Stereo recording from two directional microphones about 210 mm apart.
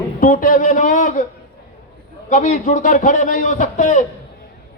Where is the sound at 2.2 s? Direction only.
35° left (ahead or behind).